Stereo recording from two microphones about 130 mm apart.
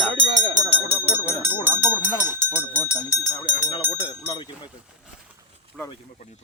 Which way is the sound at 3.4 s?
40° left (ahead or behind).